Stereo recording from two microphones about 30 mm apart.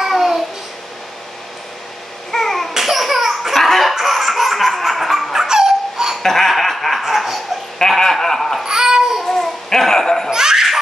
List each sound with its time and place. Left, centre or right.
0.0 s babbling: centre
2.3 s babbling: centre
2.7 s laughter: centre
3.5 s laughter: centre
3.9 s baby laughter: centre
5.3 s a sound: centre
6.2 s laughter: centre
6.5 s snicker: centre
7.0 s dog: centre
7.8 s a sound: centre
8.6 s babbling: centre
9.3 s babbling: centre
10.3 s laughter: centre